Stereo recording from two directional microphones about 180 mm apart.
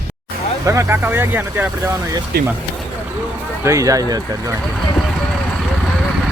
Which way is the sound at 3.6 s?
15° right (ahead or behind).